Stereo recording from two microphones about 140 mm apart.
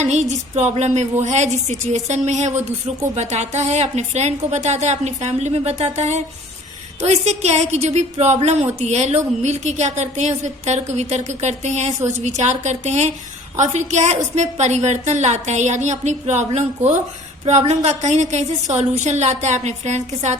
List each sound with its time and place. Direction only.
0.0 s a woman's voice: 55° right (ahead or behind)